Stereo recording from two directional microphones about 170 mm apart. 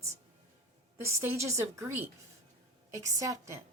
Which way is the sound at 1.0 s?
15° right (ahead or behind).